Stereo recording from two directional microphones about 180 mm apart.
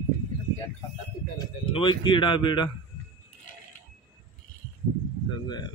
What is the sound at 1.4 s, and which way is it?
A man's voice, 25° left (ahead or behind).